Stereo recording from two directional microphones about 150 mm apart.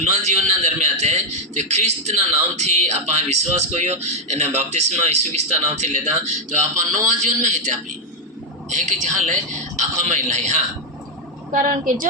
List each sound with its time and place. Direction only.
0.0 s a man's voice: 50° right (ahead or behind)
8.7 s a man's voice: 55° right (ahead or behind)